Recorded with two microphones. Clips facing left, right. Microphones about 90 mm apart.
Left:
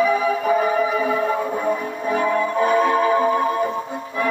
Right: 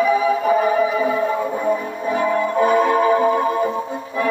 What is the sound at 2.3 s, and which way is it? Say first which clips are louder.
Music: right 3 dB; 25° right (ahead or behind).